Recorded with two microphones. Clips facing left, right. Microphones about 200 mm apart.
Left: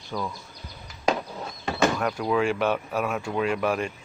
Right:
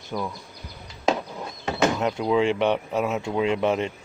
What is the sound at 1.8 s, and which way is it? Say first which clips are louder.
Speech: right 1 dB; 20° right (ahead or behind).